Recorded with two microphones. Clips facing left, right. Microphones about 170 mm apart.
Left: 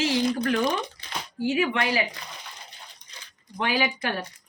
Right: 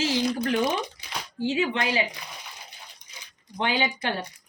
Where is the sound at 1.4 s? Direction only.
25° right (ahead or behind).